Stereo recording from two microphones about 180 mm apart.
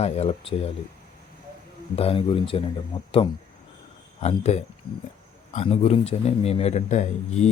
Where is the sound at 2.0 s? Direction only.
30° left (ahead or behind).